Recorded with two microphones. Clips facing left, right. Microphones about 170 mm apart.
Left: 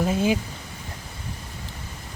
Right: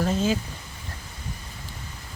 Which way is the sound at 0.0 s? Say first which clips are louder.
Left 2 dB; 10° left (ahead or behind).